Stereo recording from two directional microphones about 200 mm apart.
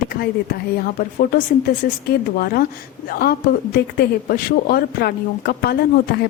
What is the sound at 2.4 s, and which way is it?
A woman's voice, 50° left (ahead or behind).